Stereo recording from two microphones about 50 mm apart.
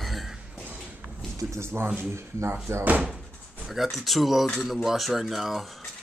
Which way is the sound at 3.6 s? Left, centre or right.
Centre.